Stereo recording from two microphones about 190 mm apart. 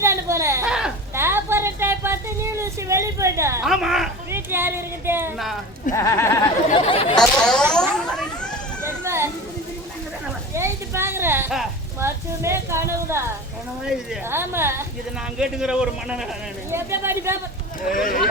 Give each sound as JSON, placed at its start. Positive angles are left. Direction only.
{"t": 0.0, "sound": "a sound", "side_deg": -15}
{"t": 0.7, "sound": "a sound", "side_deg": -5}
{"t": 3.7, "sound": "a sound", "side_deg": 0}
{"t": 4.3, "sound": "speech", "side_deg": -10}
{"t": 5.9, "sound": "speech", "side_deg": 15}
{"t": 6.7, "sound": "speech", "side_deg": 30}
{"t": 7.2, "sound": "a man's voice", "side_deg": 5}
{"t": 7.7, "sound": "vehicle", "side_deg": 5}
{"t": 8.8, "sound": "children playing", "side_deg": -15}
{"t": 10.5, "sound": "a sound", "side_deg": -15}
{"t": 11.9, "sound": "a man's voice", "side_deg": -15}
{"t": 17.8, "sound": "speech", "side_deg": 45}